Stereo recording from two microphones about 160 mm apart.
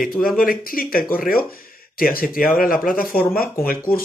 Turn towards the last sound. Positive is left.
turn(degrees=10)  # may be behind; listen again after turning